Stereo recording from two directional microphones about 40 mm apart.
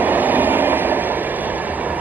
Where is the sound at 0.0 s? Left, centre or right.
Right.